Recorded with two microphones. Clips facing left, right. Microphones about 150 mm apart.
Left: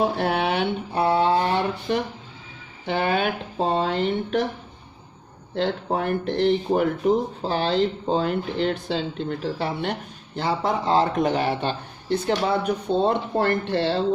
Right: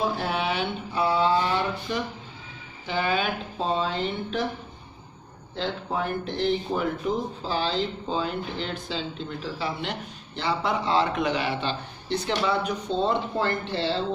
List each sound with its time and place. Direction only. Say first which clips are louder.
0.0 s speech: left 4 dB; 60° left (ahead or behind)
5.5 s speech: left 5 dB; 60° left (ahead or behind)